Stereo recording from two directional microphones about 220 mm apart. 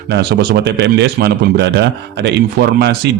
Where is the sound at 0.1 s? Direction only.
50° right (ahead or behind).